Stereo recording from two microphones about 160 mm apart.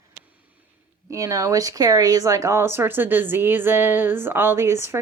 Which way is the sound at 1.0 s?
20° right (ahead or behind).